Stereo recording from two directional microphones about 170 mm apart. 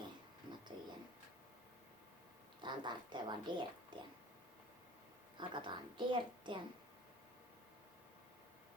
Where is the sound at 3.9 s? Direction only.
25° right (ahead or behind).